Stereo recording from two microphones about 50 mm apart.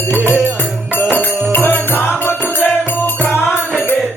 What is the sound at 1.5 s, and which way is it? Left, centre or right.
Music, left.